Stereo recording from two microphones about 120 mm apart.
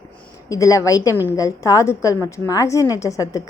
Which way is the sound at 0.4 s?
30° left (ahead or behind).